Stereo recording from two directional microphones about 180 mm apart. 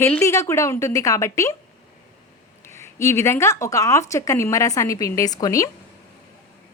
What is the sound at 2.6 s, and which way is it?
Speech, 15° left (ahead or behind).